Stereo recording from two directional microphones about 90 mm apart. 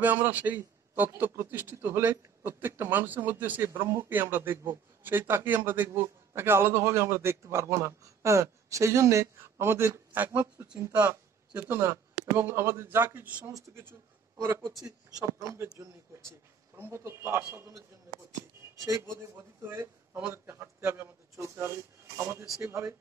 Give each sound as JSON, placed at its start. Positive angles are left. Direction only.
{"t": 0.0, "sound": "a man's voice", "side_deg": -20}
{"t": 11.6, "sound": "a man's voice", "side_deg": -30}
{"t": 13.4, "sound": "a man's voice", "side_deg": -40}
{"t": 14.4, "sound": "a man's voice", "side_deg": -25}
{"t": 14.8, "sound": "a man's voice", "side_deg": -40}
{"t": 19.3, "sound": "a man's voice", "side_deg": -25}